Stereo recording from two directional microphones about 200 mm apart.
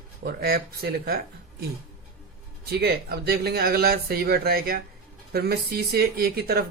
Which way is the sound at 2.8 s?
50° right (ahead or behind).